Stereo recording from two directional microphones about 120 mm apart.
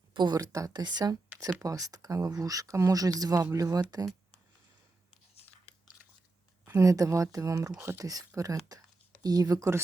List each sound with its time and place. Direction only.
0.1 s speech: 35° right (ahead or behind)
6.7 s speech: 25° right (ahead or behind)
8.7 s a sound: 30° right (ahead or behind)
9.2 s speech: 30° right (ahead or behind)